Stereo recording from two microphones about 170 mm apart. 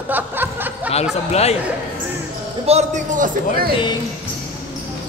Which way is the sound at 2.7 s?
45° right (ahead or behind).